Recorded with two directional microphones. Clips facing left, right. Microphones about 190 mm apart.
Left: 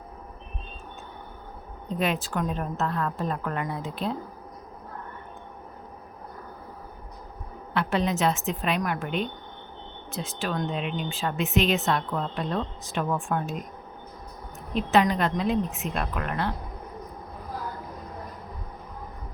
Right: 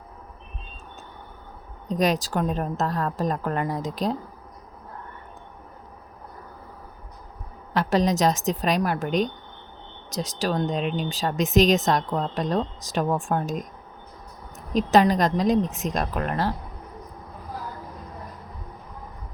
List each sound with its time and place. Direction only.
1.9 s a woman's voice: 40° right (ahead or behind)
7.7 s a woman's voice: 40° right (ahead or behind)
14.7 s a woman's voice: 40° right (ahead or behind)